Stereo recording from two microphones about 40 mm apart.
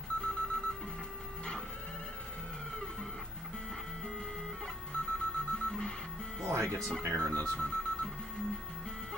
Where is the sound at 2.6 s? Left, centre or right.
Centre.